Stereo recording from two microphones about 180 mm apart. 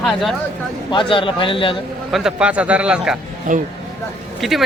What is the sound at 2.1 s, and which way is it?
A man's voice, 5° right (ahead or behind).